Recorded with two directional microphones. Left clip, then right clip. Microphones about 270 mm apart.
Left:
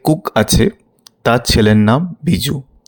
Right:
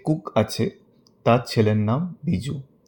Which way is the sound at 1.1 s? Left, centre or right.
Left.